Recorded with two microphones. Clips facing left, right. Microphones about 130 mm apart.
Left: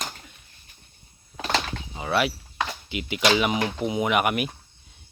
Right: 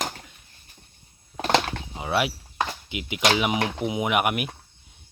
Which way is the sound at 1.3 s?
50° right (ahead or behind).